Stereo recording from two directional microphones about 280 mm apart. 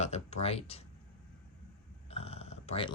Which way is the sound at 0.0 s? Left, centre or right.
Left.